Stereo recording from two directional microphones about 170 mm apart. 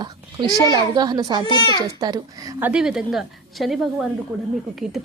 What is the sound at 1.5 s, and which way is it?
Speech, 25° left (ahead or behind).